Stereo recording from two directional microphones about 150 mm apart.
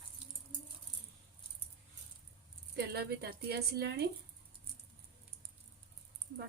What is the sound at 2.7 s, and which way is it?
A woman's voice, 90° right.